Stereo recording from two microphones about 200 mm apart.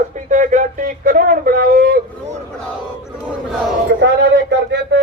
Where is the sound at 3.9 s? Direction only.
60° right (ahead or behind).